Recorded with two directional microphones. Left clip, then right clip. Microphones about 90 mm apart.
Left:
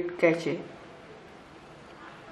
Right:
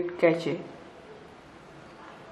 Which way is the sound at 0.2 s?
20° right (ahead or behind).